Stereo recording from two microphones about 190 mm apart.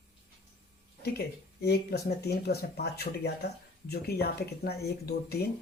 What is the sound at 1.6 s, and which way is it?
Speech, 55° left (ahead or behind).